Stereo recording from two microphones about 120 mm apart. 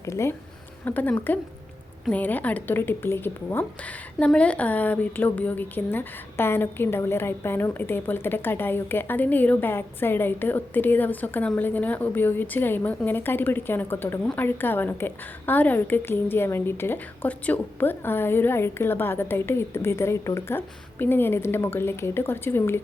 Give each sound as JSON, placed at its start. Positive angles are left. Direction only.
{"t": 0.0, "sound": "a woman's voice", "side_deg": 25}